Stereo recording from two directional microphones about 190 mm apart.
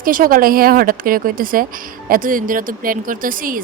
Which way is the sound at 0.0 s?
45° right (ahead or behind).